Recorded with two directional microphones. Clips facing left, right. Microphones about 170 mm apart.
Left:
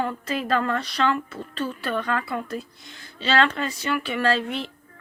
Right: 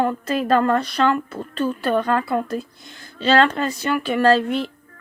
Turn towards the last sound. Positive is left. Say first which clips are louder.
# right 7 dB
turn(degrees=-45)  # may be behind; listen again after turning